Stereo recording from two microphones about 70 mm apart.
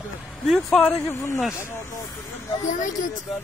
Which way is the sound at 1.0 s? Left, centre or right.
Left.